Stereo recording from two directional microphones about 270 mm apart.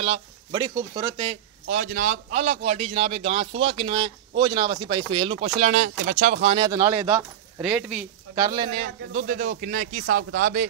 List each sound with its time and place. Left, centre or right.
0.0 s speech: centre
1.7 s a man's voice: right
7.6 s speech: centre
8.5 s a man's voice: centre
9.0 s a man's voice: right